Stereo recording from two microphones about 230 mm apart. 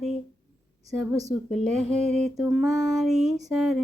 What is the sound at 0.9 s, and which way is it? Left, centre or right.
Speech, centre.